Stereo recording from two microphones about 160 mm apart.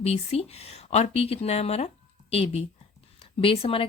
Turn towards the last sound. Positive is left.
turn(degrees=35)  # may be behind; listen again after turning